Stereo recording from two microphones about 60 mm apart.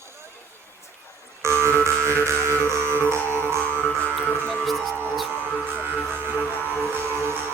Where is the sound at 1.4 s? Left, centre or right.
Right.